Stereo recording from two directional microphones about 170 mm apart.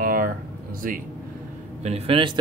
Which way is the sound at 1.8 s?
35° right (ahead or behind).